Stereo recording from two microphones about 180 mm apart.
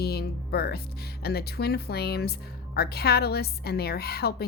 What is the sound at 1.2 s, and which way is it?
A woman's voice, 60° left (ahead or behind).